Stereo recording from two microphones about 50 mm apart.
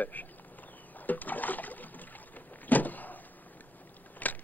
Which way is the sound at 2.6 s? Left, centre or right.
Left.